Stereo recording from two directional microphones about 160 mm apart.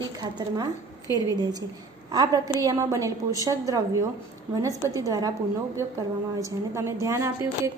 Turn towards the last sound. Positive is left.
turn(degrees=-20)  # may be behind; listen again after turning